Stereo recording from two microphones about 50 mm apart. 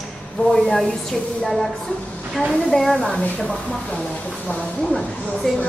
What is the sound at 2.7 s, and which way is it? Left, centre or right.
Speech, centre.